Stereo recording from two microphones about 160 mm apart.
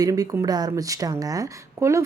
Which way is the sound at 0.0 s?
25° right (ahead or behind).